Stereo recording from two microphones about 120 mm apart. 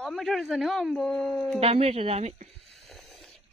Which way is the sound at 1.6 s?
55° right (ahead or behind).